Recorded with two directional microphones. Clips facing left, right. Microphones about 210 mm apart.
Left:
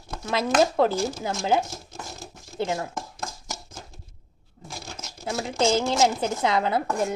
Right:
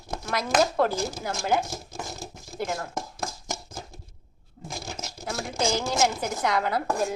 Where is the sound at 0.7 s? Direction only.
20° left (ahead or behind).